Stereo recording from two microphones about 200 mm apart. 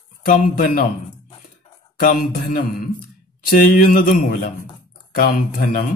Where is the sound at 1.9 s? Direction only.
40° left (ahead or behind).